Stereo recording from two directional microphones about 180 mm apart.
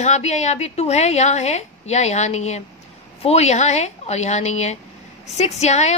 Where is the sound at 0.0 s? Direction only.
40° left (ahead or behind).